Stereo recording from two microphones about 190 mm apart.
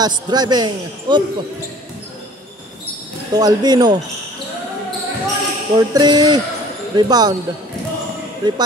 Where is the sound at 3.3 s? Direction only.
20° right (ahead or behind).